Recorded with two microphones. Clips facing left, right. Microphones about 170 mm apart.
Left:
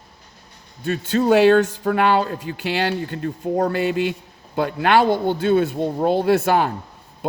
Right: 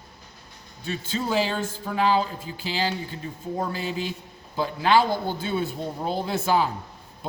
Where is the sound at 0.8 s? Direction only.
60° left (ahead or behind).